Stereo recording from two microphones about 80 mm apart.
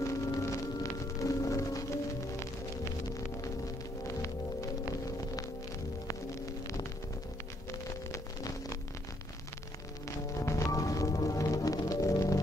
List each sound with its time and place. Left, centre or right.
0.0 s music: left
8.1 s a sound: left
10.0 s music: left